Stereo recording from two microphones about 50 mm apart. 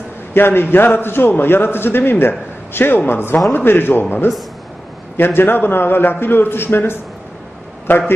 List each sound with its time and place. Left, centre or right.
0.3 s a man's voice: left
5.1 s a man's voice: left